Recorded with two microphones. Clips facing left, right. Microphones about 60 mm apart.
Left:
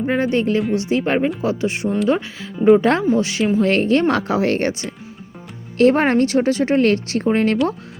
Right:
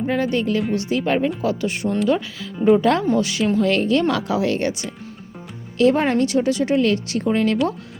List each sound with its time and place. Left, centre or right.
0.0 s speech: left
5.8 s speech: left